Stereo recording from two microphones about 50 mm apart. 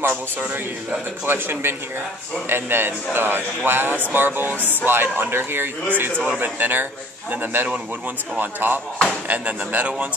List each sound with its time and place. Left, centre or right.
1.2 s a man's voice: right
8.9 s speech: centre
9.3 s speech: right